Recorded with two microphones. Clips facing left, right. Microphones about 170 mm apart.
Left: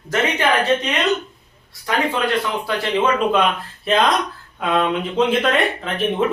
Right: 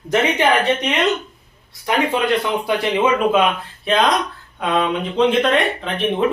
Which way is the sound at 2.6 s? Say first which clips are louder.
Right 3 dB; 15° right (ahead or behind).